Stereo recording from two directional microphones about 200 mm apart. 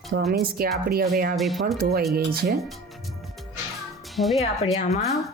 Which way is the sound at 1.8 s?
50° right (ahead or behind).